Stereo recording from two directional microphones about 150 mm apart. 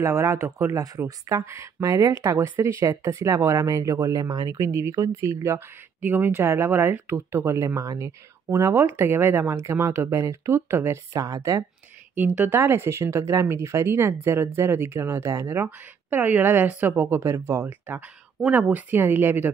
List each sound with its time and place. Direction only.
0.0 s speech: 20° right (ahead or behind)